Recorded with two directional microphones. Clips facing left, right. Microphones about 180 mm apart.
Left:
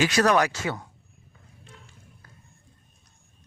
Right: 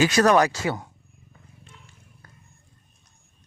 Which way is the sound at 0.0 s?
45° right (ahead or behind).